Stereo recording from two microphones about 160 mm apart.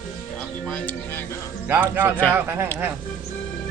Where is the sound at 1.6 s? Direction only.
10° right (ahead or behind).